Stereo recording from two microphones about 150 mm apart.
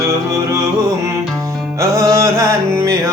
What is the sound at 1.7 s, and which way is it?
Music, 20° right (ahead or behind).